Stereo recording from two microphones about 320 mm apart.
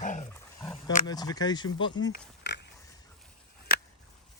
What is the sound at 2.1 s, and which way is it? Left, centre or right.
Pig, left.